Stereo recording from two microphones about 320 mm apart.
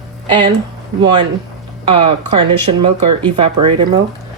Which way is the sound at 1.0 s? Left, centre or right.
Centre.